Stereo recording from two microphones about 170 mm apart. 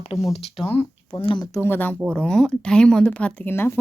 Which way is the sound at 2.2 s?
5° left (ahead or behind).